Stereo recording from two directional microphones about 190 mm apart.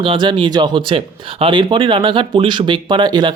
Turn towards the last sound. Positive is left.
turn(degrees=-25)  # may be behind; listen again after turning